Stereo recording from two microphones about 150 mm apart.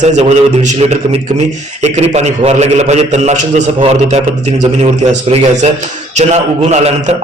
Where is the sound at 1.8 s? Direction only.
45° right (ahead or behind).